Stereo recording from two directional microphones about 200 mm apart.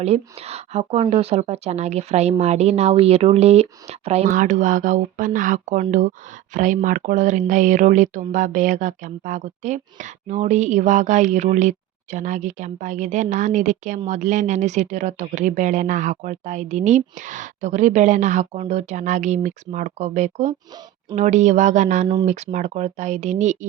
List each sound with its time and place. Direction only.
0.0 s speech: 30° right (ahead or behind)